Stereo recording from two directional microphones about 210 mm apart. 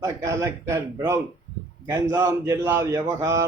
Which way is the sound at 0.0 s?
15° right (ahead or behind).